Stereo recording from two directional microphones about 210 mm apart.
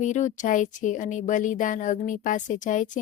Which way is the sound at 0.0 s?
35° left (ahead or behind).